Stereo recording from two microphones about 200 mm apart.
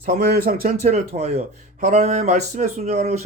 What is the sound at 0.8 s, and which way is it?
Speech, 35° right (ahead or behind).